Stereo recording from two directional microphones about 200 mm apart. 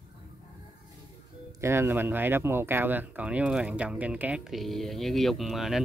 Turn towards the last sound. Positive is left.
turn(degrees=0)  # may be behind; listen again after turning